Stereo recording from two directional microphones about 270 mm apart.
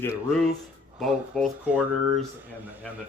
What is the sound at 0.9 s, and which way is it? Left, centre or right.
Speech, centre.